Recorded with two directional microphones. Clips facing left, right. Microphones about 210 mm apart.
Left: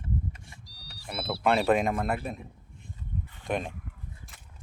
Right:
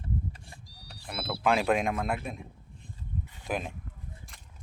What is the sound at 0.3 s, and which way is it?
Vehicle, 35° right (ahead or behind).